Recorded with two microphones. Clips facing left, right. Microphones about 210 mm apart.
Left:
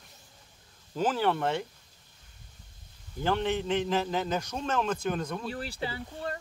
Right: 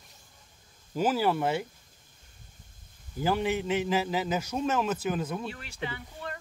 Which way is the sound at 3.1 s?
5° right (ahead or behind).